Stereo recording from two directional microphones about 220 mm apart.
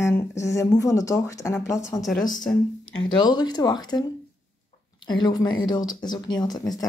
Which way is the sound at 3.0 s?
20° left (ahead or behind).